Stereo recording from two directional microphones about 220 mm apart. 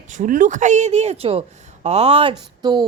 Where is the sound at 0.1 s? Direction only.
35° right (ahead or behind).